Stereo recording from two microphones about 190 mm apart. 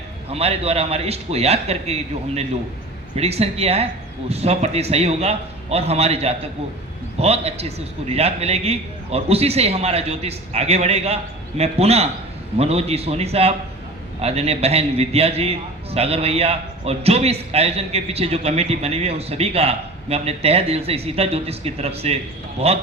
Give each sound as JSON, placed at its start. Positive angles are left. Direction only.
{"t": 0.3, "sound": "a man's voice", "side_deg": -30}